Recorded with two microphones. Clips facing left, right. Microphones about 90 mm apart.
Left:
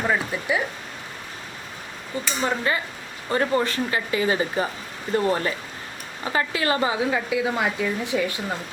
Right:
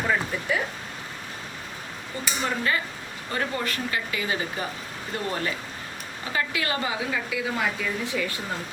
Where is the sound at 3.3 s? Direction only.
30° left (ahead or behind).